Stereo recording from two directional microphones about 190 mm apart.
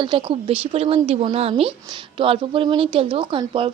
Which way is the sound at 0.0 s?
25° right (ahead or behind).